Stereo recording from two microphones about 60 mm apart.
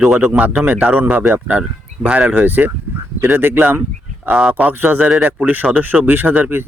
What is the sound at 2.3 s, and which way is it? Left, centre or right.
Speech, right.